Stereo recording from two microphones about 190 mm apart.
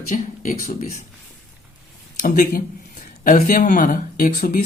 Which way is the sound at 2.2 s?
45° left (ahead or behind).